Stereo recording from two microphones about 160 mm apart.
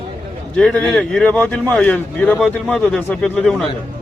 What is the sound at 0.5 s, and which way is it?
Speech, 5° left (ahead or behind).